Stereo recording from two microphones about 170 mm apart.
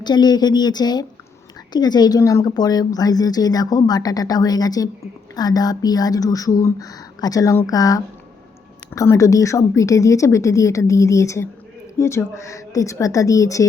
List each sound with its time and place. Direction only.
0.0 s a woman's voice: 25° left (ahead or behind)